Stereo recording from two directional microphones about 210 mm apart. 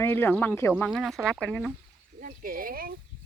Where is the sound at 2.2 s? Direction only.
40° right (ahead or behind).